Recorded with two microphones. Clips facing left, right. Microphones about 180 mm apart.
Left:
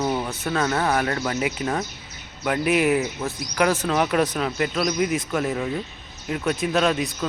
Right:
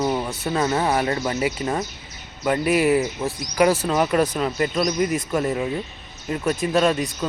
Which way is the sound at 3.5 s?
15° right (ahead or behind).